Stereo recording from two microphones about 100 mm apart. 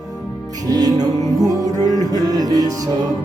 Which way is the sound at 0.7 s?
40° right (ahead or behind).